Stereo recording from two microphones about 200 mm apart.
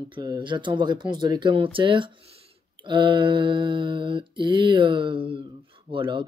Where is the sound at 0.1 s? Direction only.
25° right (ahead or behind).